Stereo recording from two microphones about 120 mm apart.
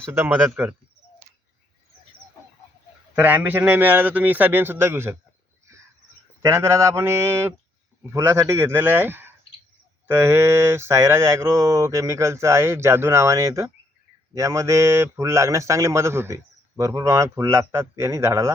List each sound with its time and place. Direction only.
0.0 s a man's voice: 20° right (ahead or behind)
3.2 s a man's voice: 15° right (ahead or behind)
6.4 s speech: 25° right (ahead or behind)